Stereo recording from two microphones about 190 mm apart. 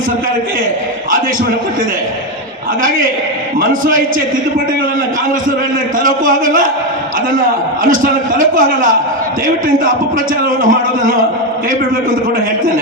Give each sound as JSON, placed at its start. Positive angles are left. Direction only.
{"t": 6.0, "sound": "a man's voice", "side_deg": -45}
{"t": 10.6, "sound": "a man's voice", "side_deg": -45}